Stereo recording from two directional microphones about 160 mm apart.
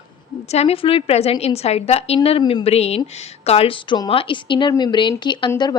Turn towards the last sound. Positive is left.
turn(degrees=30)  # may be behind; listen again after turning